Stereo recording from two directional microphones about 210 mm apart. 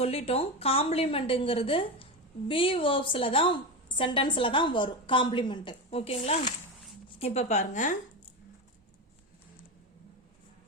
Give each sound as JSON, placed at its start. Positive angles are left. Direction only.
{"t": 0.0, "sound": "a woman's voice", "side_deg": 30}